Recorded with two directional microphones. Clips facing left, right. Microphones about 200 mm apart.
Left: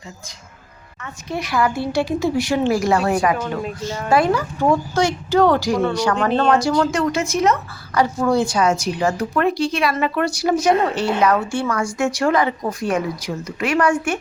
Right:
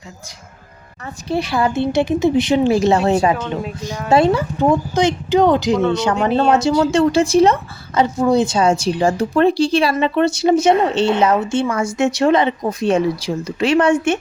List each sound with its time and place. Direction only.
1.0 s a woman's voice: 30° right (ahead or behind)
6.1 s speech: 10° right (ahead or behind)
6.9 s a woman's voice: 30° right (ahead or behind)